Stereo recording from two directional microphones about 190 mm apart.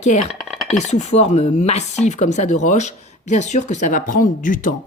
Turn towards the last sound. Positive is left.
turn(degrees=45)  # may be behind; listen again after turning